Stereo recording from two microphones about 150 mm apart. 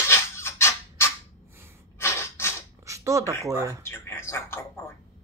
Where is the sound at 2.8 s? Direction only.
20° right (ahead or behind).